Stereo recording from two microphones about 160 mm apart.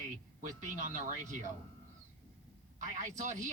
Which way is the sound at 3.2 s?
50° right (ahead or behind).